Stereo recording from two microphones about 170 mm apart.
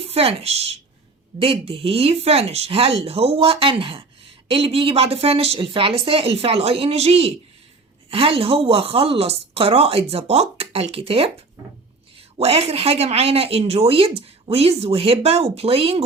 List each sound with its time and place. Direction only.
0.0 s a woman's voice: 35° right (ahead or behind)
12.4 s speech: 35° right (ahead or behind)